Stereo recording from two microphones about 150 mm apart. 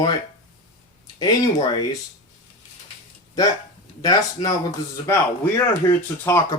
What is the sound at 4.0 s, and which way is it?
Speech, 25° left (ahead or behind).